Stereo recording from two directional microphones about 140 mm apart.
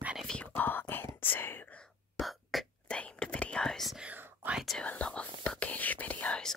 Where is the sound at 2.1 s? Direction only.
Centre (ahead or behind).